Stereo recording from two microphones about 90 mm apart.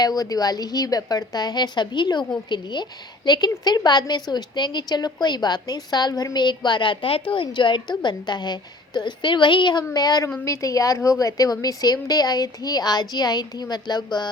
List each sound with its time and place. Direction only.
0.0 s a woman's voice: 45° left (ahead or behind)